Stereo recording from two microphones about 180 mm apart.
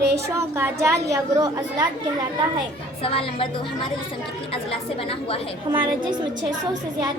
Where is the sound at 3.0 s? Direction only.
30° left (ahead or behind).